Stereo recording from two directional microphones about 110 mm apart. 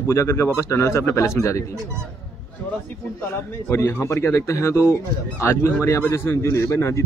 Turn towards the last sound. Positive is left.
turn(degrees=25)  # may be behind; listen again after turning